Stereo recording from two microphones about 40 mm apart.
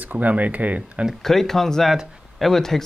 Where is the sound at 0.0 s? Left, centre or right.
Right.